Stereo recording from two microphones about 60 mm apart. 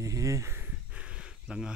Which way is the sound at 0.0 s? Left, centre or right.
Right.